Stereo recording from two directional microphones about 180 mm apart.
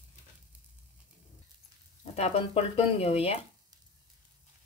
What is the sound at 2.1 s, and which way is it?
Speech, 35° left (ahead or behind).